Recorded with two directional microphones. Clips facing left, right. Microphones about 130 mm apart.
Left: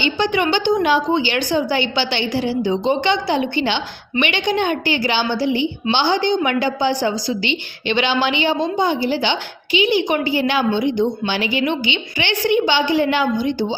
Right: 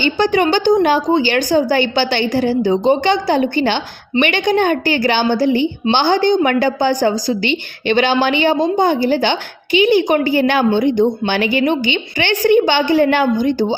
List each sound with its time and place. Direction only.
0.0 s a woman's voice: 40° right (ahead or behind)